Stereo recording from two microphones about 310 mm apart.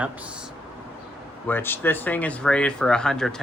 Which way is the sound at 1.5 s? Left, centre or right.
Centre.